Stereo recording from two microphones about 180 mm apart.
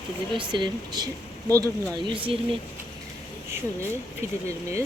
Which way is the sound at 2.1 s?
30° right (ahead or behind).